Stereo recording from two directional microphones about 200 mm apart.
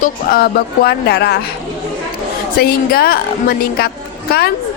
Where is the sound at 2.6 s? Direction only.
50° left (ahead or behind).